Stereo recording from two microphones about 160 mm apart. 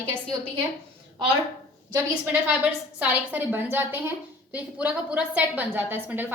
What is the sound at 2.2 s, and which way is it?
A woman's voice, 10° right (ahead or behind).